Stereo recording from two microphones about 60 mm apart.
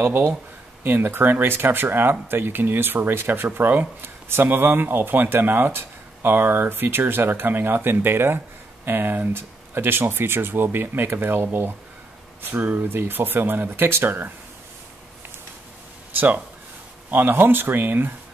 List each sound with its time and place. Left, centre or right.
0.0 s speech: right
17.1 s speech: right